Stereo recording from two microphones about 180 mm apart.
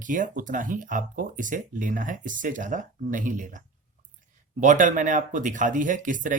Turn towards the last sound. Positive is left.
turn(degrees=-45)  # may be behind; listen again after turning